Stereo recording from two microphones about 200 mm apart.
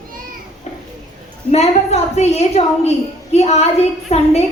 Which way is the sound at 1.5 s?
30° left (ahead or behind).